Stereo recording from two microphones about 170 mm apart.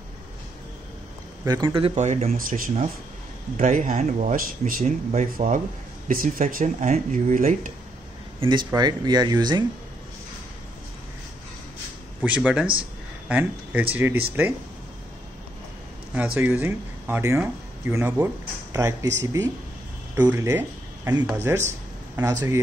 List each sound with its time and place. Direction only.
1.4 s speech: 20° right (ahead or behind); by 5.6 s 45° right (ahead or behind)
6.0 s speech: 55° right (ahead or behind)
8.4 s speech: 25° right (ahead or behind)
12.2 s speech: 10° right (ahead or behind)
16.2 s speech: 10° right (ahead or behind)